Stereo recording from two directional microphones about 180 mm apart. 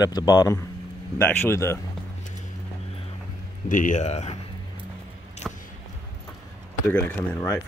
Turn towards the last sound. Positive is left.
turn(degrees=10)  # may be behind; listen again after turning